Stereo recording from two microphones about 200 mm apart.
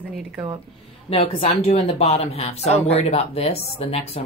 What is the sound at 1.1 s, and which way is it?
Speech, 30° left (ahead or behind).